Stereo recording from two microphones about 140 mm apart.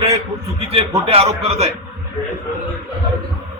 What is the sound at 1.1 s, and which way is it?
Speech, 45° right (ahead or behind).